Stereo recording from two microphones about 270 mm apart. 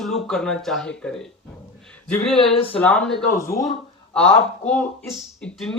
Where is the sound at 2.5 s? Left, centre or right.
Left.